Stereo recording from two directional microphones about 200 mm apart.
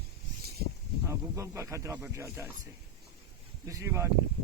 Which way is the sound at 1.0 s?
15° right (ahead or behind).